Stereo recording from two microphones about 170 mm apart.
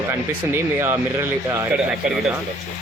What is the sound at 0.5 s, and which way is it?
Speech, 15° right (ahead or behind).